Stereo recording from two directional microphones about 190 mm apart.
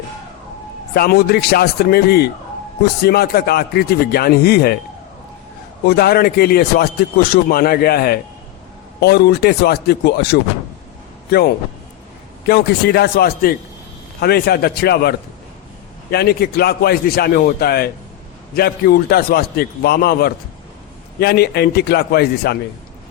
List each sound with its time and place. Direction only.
0.9 s speech: 55° left (ahead or behind)
5.8 s a man's voice: 55° left (ahead or behind)
16.1 s speech: 55° left (ahead or behind)